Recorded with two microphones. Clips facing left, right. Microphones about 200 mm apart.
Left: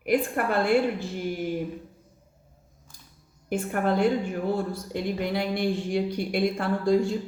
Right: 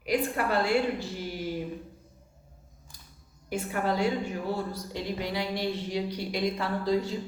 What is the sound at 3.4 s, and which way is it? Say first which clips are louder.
Speech: left 4 dB; 50° left (ahead or behind).